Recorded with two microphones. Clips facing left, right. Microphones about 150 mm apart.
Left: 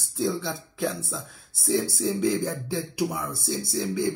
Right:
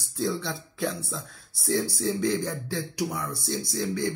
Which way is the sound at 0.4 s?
Centre (ahead or behind).